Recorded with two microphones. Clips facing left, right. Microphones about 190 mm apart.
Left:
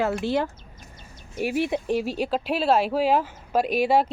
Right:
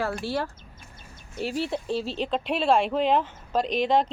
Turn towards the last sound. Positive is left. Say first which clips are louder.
# left 2 dB
turn(degrees=10)  # may be behind; listen again after turning